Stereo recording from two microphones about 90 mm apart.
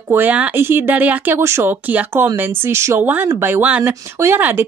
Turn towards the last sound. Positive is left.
turn(degrees=-20)  # may be behind; listen again after turning